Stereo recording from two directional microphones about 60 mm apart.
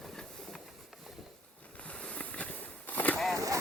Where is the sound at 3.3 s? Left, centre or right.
Right.